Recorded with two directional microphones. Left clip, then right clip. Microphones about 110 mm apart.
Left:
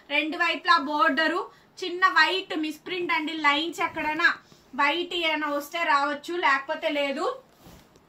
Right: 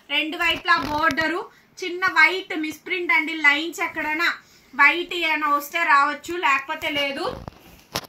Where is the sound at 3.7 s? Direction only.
30° left (ahead or behind).